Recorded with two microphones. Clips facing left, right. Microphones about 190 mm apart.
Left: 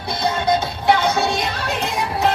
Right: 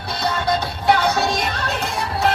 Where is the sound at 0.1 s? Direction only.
15° left (ahead or behind).